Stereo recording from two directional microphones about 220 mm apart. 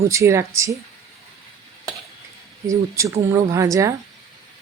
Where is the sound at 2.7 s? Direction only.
15° right (ahead or behind).